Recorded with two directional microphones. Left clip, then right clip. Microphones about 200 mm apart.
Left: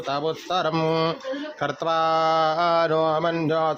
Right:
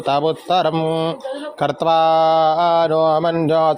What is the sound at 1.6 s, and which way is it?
Mantra, 15° right (ahead or behind).